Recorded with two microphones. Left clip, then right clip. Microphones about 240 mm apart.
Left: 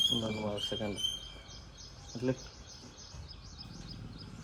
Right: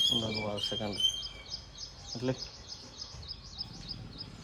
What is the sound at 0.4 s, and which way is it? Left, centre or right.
Speech, centre.